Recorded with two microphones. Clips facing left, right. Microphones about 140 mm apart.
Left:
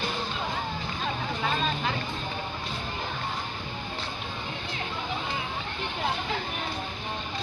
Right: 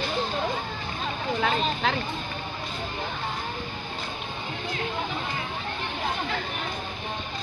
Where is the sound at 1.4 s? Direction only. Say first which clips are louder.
Right 4 dB; 80° right.